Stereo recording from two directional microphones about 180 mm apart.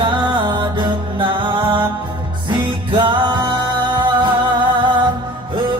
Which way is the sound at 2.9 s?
25° right (ahead or behind).